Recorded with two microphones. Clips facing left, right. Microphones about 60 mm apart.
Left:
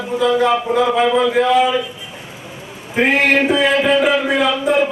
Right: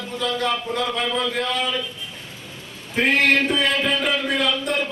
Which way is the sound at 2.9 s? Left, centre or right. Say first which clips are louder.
Left 4 dB; centre.